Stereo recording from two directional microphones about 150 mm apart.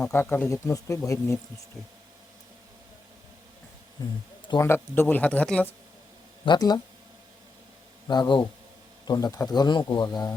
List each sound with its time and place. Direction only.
0.0 s speech: 15° left (ahead or behind)
4.0 s speech: 25° left (ahead or behind)
6.4 s speech: 30° left (ahead or behind)
8.0 s speech: 30° left (ahead or behind)